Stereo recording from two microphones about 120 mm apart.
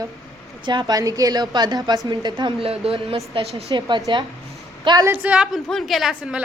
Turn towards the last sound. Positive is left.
turn(degrees=-5)  # may be behind; listen again after turning